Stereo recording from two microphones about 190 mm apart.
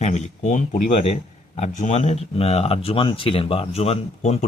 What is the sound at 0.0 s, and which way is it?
Speech, 35° left (ahead or behind).